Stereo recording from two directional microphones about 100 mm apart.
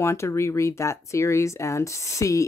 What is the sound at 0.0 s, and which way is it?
Speech, 30° left (ahead or behind).